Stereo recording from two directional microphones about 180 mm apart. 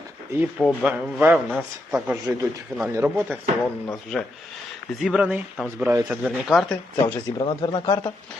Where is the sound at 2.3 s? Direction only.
10° right (ahead or behind).